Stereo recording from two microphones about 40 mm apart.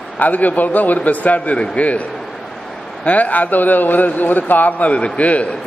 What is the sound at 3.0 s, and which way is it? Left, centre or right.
A man's voice, left.